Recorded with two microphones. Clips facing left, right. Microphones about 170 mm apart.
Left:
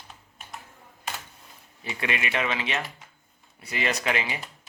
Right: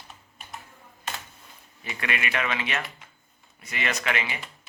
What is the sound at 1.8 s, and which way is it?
Speech, 30° left (ahead or behind).